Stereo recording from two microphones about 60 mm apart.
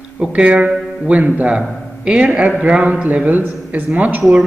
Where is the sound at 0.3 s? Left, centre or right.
Right.